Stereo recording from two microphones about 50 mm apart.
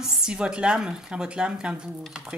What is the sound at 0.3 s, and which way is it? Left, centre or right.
A woman's voice, centre.